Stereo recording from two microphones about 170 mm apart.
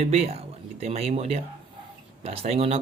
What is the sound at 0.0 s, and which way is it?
Speech, 40° right (ahead or behind).